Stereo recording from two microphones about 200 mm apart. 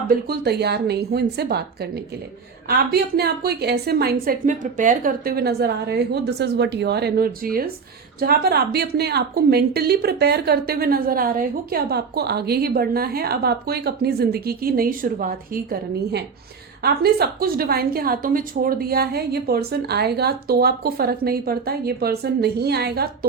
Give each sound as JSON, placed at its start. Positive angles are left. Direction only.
{"t": 0.3, "sound": "a woman's voice", "side_deg": -55}